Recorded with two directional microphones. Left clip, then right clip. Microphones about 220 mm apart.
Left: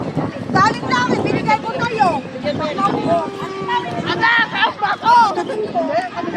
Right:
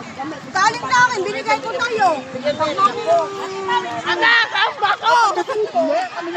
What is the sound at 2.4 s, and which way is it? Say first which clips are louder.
Speech: right 4 dB; 10° right (ahead or behind).